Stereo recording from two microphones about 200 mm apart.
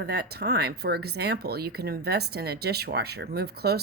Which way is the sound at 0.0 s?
55° right (ahead or behind).